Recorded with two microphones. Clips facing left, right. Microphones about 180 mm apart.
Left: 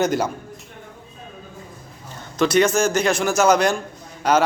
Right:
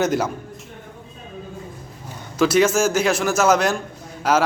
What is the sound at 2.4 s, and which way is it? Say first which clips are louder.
A man's voice: right 1 dB; 5° right (ahead or behind).